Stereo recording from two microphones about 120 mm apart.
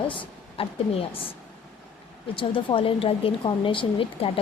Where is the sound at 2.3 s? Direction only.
45° left (ahead or behind).